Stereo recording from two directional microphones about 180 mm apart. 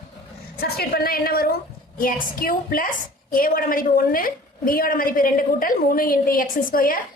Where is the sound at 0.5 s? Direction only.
60° left (ahead or behind).